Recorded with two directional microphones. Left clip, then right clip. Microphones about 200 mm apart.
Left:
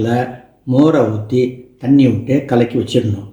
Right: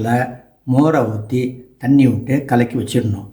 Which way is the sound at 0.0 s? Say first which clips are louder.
Left 1 dB; 35° right (ahead or behind).